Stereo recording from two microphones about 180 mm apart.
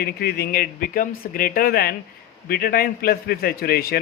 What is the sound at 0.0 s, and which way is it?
Speech, 60° left (ahead or behind).